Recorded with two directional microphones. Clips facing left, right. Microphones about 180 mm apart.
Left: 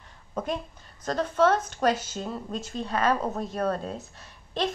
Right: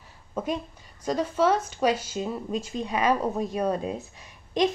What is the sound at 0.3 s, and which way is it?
A woman's voice, 5° right (ahead or behind).